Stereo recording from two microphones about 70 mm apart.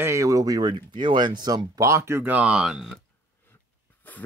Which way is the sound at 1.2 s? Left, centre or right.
Right.